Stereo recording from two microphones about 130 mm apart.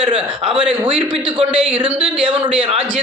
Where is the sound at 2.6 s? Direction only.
45° right (ahead or behind).